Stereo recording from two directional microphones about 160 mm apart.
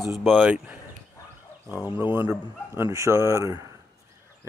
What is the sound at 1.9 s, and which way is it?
Speech, 15° right (ahead or behind).